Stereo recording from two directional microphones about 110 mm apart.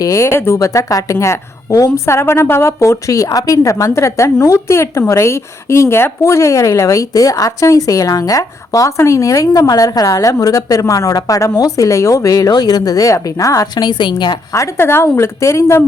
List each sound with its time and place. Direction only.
0.0 s a woman's voice: 25° left (ahead or behind)